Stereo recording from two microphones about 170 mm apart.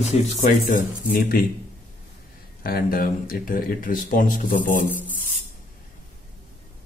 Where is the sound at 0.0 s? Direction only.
40° left (ahead or behind); by 1.5 s 60° left (ahead or behind).